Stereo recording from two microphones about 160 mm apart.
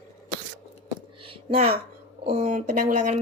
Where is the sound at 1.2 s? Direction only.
35° right (ahead or behind).